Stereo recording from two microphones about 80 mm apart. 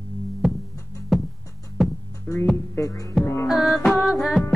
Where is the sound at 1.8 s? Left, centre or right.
Centre.